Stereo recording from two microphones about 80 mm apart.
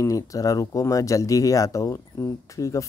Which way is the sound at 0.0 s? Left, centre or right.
Left.